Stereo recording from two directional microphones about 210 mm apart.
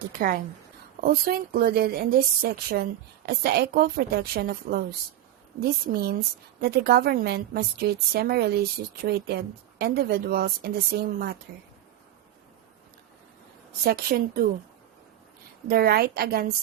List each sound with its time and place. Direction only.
0.2 s a woman's voice: 40° right (ahead or behind)
13.8 s a woman's voice: 45° right (ahead or behind)
15.7 s a woman's voice: 45° right (ahead or behind)